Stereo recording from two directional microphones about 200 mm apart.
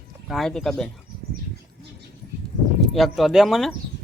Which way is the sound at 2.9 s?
Centre (ahead or behind).